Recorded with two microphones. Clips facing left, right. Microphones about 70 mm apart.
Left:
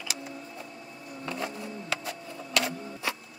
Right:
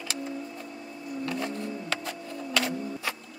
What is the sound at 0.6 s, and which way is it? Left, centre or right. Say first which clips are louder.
Printer: right 4 dB; right.